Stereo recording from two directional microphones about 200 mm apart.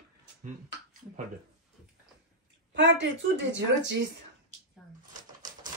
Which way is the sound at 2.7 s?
65° right (ahead or behind).